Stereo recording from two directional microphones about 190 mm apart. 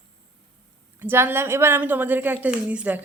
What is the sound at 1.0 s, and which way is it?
A woman's voice, 10° right (ahead or behind).